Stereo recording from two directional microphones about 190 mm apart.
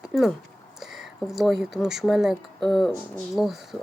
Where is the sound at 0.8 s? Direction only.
Centre (ahead or behind).